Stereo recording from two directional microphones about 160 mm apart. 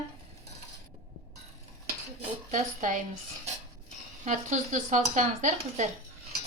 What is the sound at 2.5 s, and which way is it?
Speech, 50° right (ahead or behind).